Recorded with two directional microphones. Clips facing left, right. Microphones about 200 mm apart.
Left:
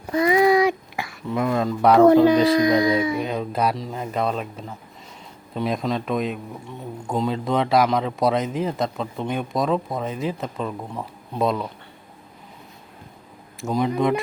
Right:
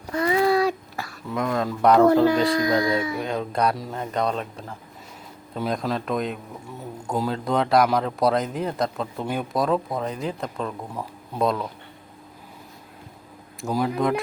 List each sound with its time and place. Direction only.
0.1 s a sound: 15° left (ahead or behind)
1.3 s a man's voice: 5° left (ahead or behind)
2.6 s speech: 20° left (ahead or behind)
3.2 s a man's voice: 5° left (ahead or behind)
13.6 s a man's voice: centre (ahead or behind)